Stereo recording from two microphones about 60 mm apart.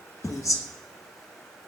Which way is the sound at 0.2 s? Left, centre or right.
Left.